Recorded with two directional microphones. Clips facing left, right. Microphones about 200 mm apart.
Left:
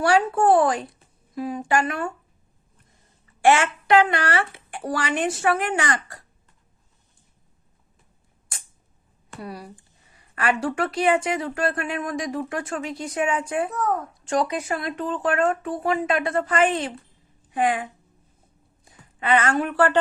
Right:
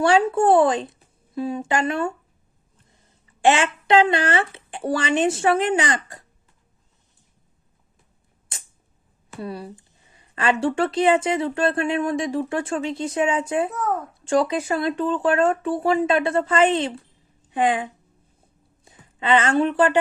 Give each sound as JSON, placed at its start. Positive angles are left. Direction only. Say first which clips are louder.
{"t": 0.0, "sound": "speech", "louder": "right 2 dB", "side_deg": -25}
{"t": 3.4, "sound": "a woman's voice", "louder": "even", "side_deg": -20}
{"t": 9.4, "sound": "speech", "louder": "right 4 dB", "side_deg": -25}
{"t": 13.7, "sound": "a child's voice", "louder": "even", "side_deg": 0}
{"t": 14.1, "sound": "a woman's voice", "louder": "right 3 dB", "side_deg": -30}